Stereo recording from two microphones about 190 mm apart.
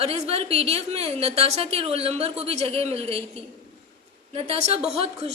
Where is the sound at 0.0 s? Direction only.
30° right (ahead or behind).